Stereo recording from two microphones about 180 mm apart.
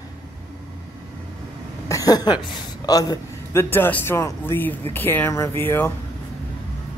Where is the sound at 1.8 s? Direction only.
20° left (ahead or behind).